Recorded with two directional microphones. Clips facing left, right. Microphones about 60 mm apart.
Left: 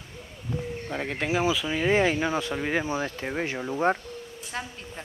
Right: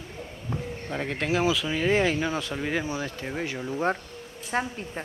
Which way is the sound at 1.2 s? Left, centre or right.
Centre.